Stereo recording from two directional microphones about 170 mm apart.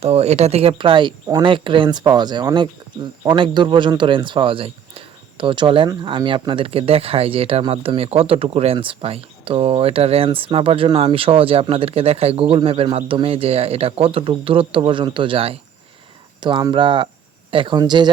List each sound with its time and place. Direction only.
0.0 s speech: 40° right (ahead or behind)